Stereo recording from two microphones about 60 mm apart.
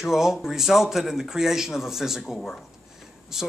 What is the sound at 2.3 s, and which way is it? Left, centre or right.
Speech, centre.